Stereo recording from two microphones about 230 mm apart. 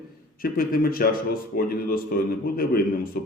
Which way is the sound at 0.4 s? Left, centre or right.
Left.